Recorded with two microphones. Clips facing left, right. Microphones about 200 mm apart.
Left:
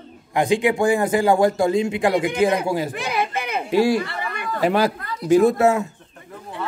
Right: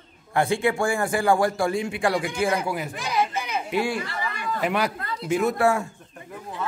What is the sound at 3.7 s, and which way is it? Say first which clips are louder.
Speech: left 10 dB; 35° left (ahead or behind).